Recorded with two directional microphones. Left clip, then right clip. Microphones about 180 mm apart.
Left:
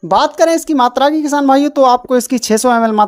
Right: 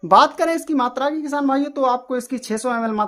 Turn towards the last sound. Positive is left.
turn(degrees=35)  # may be behind; listen again after turning